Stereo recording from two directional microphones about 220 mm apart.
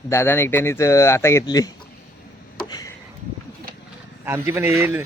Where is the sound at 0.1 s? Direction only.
10° left (ahead or behind).